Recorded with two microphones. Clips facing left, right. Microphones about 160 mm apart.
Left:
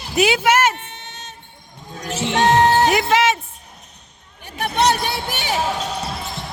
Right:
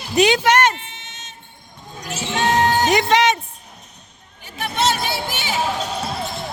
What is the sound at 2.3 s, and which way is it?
Music, 35° left (ahead or behind).